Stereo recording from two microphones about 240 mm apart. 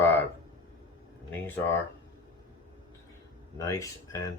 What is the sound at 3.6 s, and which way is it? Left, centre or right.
Speech, centre.